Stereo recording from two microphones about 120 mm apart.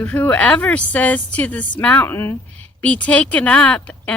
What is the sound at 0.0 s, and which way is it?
A woman's voice, 10° left (ahead or behind).